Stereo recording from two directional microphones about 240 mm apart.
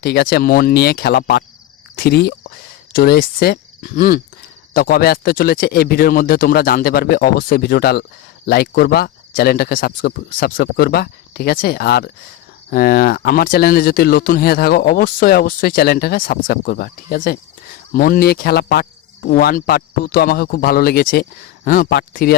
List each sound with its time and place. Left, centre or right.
0.0 s speech: left